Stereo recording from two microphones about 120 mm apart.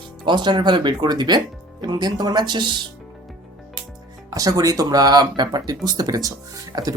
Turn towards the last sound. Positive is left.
turn(degrees=-30)  # may be behind; listen again after turning